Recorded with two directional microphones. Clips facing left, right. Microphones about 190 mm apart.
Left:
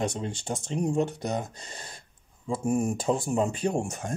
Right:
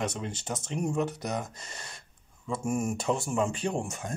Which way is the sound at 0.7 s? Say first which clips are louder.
Left 3 dB; 30° left (ahead or behind).